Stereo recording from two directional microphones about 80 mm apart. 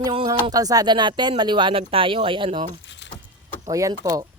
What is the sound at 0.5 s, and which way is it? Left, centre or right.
Speech, right.